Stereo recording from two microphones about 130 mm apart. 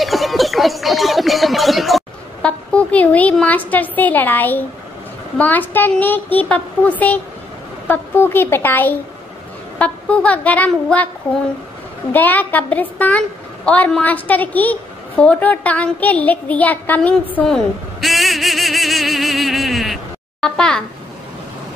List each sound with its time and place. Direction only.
0.0 s a sound: centre (ahead or behind)
5.4 s a woman's voice: 15° left (ahead or behind)
12.1 s a woman's voice: 15° left (ahead or behind)